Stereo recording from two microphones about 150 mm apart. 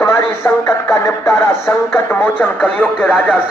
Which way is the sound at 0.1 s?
15° left (ahead or behind).